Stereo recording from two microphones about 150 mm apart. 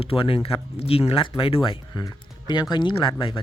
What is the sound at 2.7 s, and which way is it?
Speech, 30° left (ahead or behind).